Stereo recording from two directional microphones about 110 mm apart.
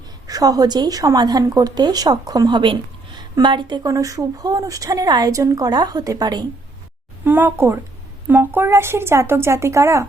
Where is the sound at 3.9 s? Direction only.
30° right (ahead or behind).